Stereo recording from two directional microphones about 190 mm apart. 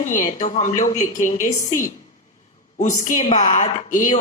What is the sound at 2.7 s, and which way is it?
Speech, 40° left (ahead or behind).